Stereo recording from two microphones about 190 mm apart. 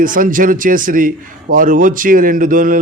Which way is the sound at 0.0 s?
45° right (ahead or behind).